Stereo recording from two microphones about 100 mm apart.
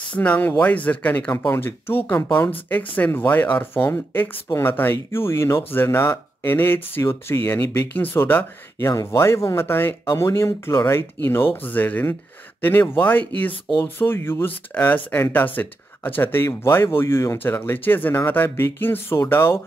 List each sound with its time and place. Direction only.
0.1 s speech: 15° left (ahead or behind)
8.7 s speech: 35° left (ahead or behind)